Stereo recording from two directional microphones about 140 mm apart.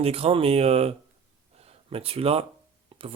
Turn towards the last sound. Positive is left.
turn(degrees=-45)  # may be behind; listen again after turning